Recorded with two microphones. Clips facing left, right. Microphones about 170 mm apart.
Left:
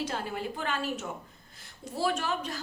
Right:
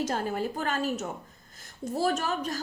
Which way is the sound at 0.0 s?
45° right (ahead or behind).